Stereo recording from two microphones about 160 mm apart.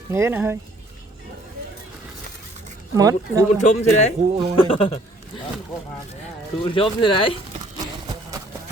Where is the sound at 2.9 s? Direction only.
20° right (ahead or behind).